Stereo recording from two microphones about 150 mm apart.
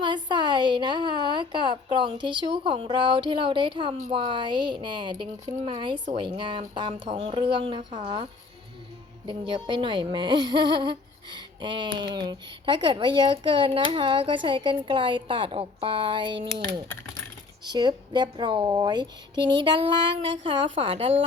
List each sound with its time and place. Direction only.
0.0 s a woman's voice: 30° right (ahead or behind)
17.6 s a woman's voice: 30° right (ahead or behind)